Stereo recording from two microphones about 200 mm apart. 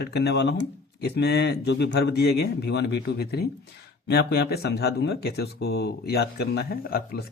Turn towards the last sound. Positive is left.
turn(degrees=50)  # may be behind; listen again after turning